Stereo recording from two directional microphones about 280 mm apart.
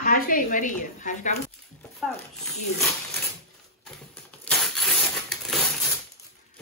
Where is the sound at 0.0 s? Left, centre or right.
Left.